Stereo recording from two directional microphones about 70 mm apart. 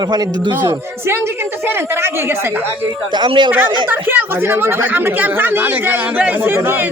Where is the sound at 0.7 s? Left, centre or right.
Right.